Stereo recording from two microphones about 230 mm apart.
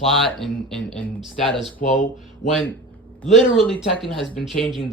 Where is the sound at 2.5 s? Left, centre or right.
Centre.